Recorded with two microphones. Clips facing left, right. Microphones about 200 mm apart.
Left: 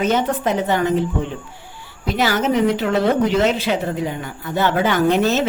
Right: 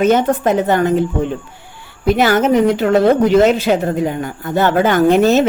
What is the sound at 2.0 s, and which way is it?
A woman's voice, 55° right (ahead or behind).